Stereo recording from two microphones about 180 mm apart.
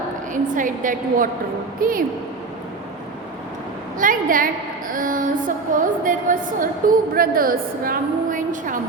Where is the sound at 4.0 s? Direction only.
50° right (ahead or behind).